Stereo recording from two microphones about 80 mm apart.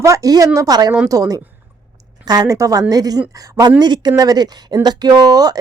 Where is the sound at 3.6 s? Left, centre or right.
Right.